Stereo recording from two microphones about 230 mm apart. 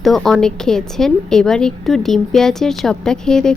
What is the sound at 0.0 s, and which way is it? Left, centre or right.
A woman's voice, centre.